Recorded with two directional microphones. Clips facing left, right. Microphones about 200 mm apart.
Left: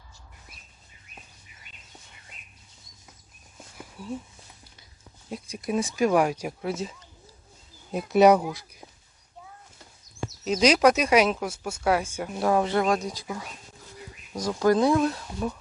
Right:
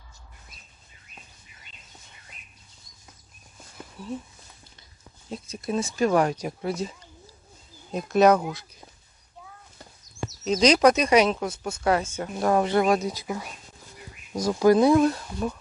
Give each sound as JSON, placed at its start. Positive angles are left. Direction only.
{"t": 3.8, "sound": "a sound", "side_deg": 10}
{"t": 5.3, "sound": "speech", "side_deg": 15}
{"t": 7.9, "sound": "speech", "side_deg": 10}
{"t": 10.4, "sound": "speech", "side_deg": 5}
{"t": 14.3, "sound": "speech", "side_deg": -10}